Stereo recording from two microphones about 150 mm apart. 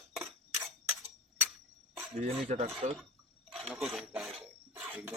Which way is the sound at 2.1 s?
45° right (ahead or behind).